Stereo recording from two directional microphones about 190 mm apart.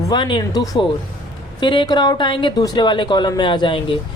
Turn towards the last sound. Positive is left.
turn(degrees=25)  # may be behind; listen again after turning